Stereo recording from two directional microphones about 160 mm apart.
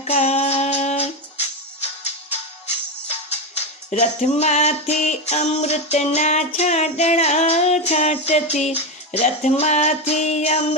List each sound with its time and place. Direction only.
0.1 s music: 40° left (ahead or behind)
3.2 s music: 40° left (ahead or behind)